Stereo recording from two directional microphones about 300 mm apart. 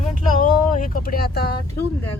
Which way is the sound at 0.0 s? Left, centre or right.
Left.